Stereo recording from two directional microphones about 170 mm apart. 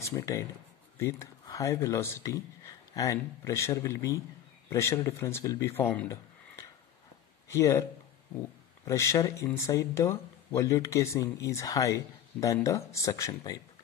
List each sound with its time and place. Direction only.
0.0 s speech: 20° left (ahead or behind)
7.4 s speech: 15° left (ahead or behind)
8.8 s speech: 15° left (ahead or behind)